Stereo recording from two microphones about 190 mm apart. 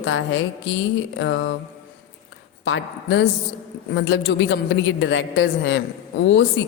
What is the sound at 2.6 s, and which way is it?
A woman's voice, 75° left (ahead or behind).